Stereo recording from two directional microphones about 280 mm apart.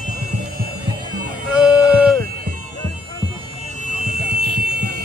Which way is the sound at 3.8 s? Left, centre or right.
Right.